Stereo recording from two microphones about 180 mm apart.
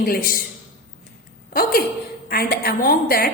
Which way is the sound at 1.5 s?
55° left (ahead or behind).